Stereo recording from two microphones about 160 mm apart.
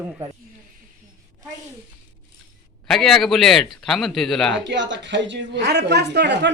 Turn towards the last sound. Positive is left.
turn(degrees=-90)